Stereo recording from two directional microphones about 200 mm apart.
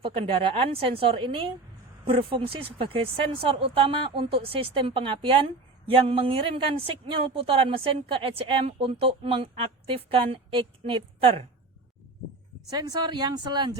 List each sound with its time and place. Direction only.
0.0 s a woman's voice: 30° right (ahead or behind)
12.7 s a woman's voice: 20° right (ahead or behind)